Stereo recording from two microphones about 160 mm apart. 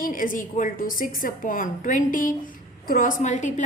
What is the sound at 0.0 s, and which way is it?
A woman's voice, 60° left (ahead or behind).